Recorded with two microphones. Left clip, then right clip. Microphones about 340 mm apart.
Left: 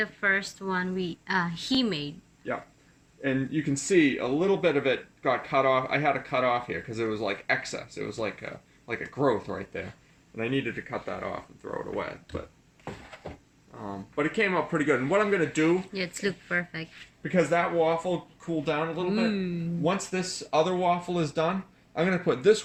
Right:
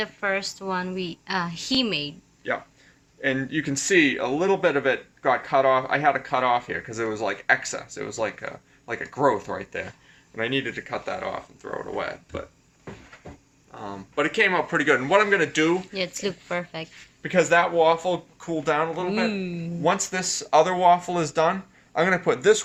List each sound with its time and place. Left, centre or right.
0.0 s a woman's voice: centre
3.2 s a man's voice: right
13.7 s speech: right
15.9 s speech: centre
16.8 s a man's voice: right
19.3 s speech: centre
19.8 s a man's voice: right